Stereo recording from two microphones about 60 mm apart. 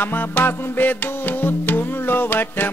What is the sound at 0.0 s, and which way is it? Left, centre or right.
Music, left.